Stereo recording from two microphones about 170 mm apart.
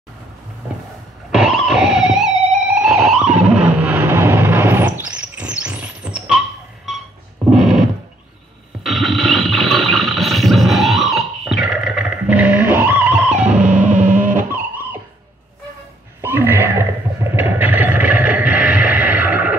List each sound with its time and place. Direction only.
1.3 s music: 5° right (ahead or behind)
7.4 s a sound: centre (ahead or behind)
8.8 s music: centre (ahead or behind)
13.9 s cacophony: 50° right (ahead or behind)
14.2 s music: 10° right (ahead or behind)
16.2 s a sound: 10° right (ahead or behind)